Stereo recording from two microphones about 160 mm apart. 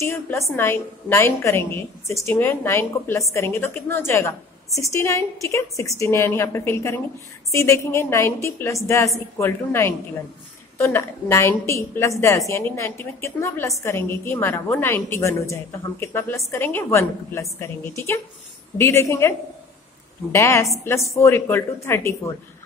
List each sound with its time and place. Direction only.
0.0 s a woman's voice: 15° left (ahead or behind)
20.3 s a woman's voice: 15° left (ahead or behind)